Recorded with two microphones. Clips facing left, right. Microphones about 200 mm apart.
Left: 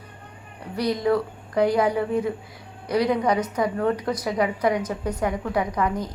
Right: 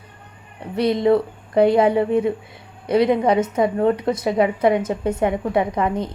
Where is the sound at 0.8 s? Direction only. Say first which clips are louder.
Right 5 dB; 25° right (ahead or behind).